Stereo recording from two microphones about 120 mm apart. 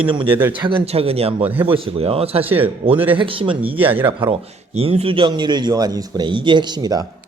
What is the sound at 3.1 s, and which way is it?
Speech, 45° right (ahead or behind).